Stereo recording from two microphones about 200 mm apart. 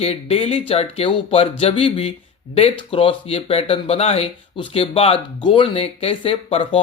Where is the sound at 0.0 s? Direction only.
30° left (ahead or behind).